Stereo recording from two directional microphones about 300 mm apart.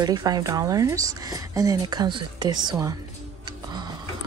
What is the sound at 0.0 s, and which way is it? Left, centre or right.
Speech, centre.